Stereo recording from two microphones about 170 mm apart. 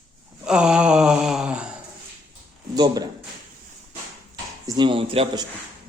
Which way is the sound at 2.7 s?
25° right (ahead or behind).